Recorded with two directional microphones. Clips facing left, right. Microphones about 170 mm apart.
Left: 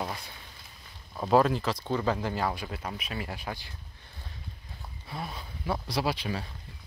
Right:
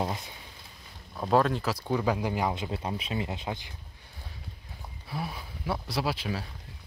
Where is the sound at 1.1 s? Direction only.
Centre (ahead or behind); by 3.7 s 20° right (ahead or behind).